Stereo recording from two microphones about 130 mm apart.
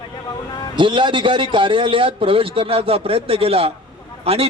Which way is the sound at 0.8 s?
40° right (ahead or behind).